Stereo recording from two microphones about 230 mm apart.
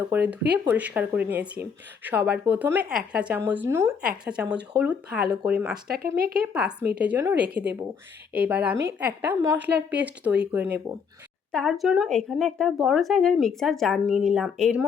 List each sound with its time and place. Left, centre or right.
0.1 s a woman's voice: centre
5.9 s speech: right
6.3 s a woman's voice: centre
7.4 s speech: right
8.3 s a woman's voice: centre
11.5 s speech: centre